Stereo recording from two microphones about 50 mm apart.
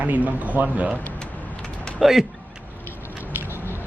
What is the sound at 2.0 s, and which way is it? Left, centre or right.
Speech, centre.